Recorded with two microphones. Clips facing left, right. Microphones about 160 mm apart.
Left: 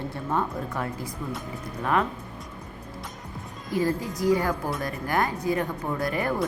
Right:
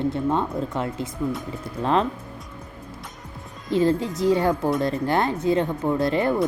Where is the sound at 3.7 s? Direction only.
25° right (ahead or behind).